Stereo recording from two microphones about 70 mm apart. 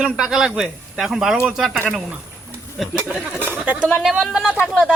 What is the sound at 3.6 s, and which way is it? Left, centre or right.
Speech, right.